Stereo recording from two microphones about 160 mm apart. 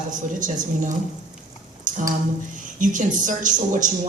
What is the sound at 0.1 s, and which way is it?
Speech, 55° right (ahead or behind).